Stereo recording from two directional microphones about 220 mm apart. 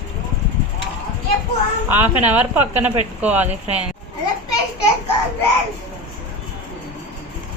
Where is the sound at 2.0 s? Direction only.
10° right (ahead or behind).